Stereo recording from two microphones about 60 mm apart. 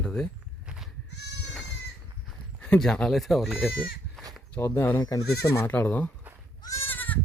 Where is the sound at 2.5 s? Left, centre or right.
Left.